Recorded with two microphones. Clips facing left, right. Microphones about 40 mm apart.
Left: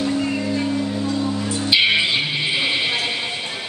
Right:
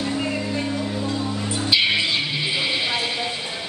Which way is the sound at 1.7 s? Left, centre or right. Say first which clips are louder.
Left 3 dB; centre.